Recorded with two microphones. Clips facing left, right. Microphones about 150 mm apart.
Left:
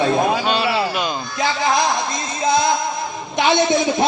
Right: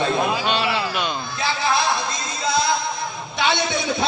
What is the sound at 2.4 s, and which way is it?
Music, 50° left (ahead or behind).